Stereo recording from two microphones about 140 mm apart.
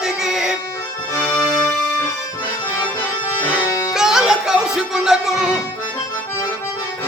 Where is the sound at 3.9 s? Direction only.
5° right (ahead or behind).